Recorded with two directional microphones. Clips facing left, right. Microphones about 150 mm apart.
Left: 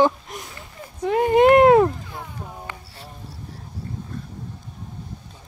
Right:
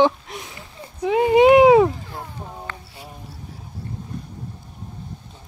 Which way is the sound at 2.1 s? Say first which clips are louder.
Right 1 dB; 20° right (ahead or behind).